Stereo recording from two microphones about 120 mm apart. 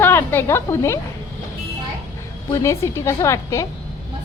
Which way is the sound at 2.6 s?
25° left (ahead or behind).